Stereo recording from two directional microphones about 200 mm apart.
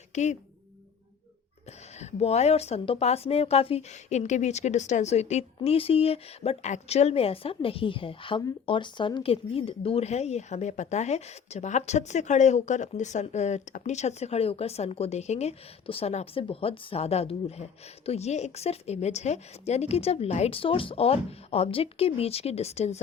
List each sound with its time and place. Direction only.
0.1 s a woman's voice: 35° left (ahead or behind)
2.0 s a woman's voice: 30° left (ahead or behind)